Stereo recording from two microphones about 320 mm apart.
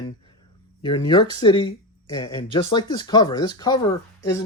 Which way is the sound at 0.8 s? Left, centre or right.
Centre.